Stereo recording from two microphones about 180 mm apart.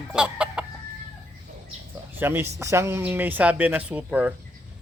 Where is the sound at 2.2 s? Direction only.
15° right (ahead or behind).